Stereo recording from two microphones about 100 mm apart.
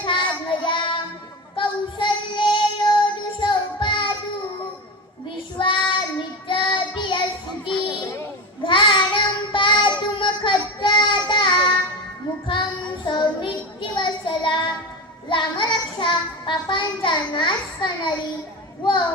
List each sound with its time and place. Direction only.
0.0 s child singing: 50° left (ahead or behind)
5.5 s child singing: 55° left (ahead or behind)
7.9 s a sound: 50° left (ahead or behind)
8.6 s child singing: 55° left (ahead or behind)
13.1 s child singing: 50° left (ahead or behind)
18.8 s a sound: 50° left (ahead or behind)